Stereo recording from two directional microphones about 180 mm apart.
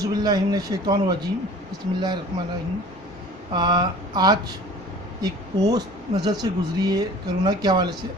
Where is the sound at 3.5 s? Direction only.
25° right (ahead or behind).